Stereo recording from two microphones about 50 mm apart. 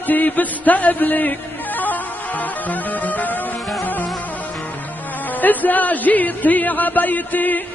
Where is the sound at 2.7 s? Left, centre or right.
Left.